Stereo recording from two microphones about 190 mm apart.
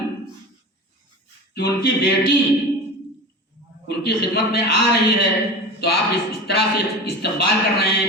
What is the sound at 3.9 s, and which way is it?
A man's voice, 60° left (ahead or behind).